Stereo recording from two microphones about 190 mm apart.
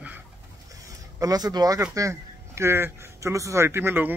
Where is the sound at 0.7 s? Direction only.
20° right (ahead or behind).